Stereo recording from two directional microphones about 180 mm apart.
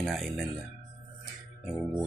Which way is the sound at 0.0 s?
Centre (ahead or behind).